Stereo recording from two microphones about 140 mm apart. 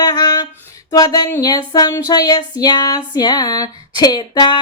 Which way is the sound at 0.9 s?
25° left (ahead or behind).